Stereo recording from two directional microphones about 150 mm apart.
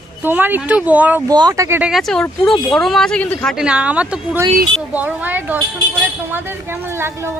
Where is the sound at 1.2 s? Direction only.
25° right (ahead or behind); by 3.5 s 10° left (ahead or behind).